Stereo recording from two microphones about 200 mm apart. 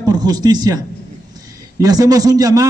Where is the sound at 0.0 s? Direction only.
20° right (ahead or behind).